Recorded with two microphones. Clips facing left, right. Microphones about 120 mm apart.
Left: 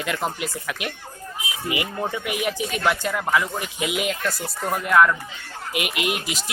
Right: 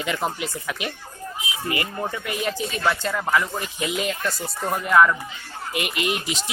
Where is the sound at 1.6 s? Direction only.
15° left (ahead or behind).